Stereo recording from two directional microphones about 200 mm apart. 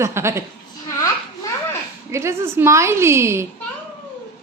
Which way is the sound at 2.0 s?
15° right (ahead or behind).